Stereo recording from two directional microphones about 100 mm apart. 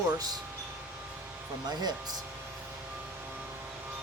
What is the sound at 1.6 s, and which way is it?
Speech, 45° right (ahead or behind).